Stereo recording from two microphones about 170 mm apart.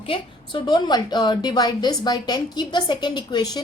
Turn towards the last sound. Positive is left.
turn(degrees=25)  # may be behind; listen again after turning